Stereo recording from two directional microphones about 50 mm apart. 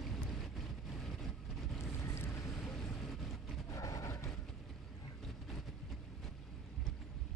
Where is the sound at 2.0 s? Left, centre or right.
Left.